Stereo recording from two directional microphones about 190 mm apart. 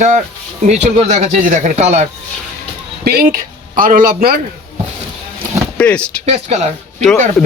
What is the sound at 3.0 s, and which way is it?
A man's voice, 50° right (ahead or behind).